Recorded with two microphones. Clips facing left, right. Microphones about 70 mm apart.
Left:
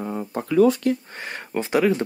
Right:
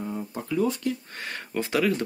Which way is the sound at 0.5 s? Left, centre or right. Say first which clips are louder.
Left 9 dB; left.